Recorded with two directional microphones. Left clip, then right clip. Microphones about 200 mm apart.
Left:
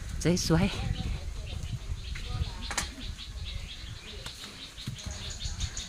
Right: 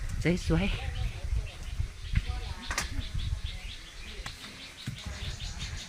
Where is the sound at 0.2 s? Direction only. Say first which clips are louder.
Left 2 dB; 25° left (ahead or behind).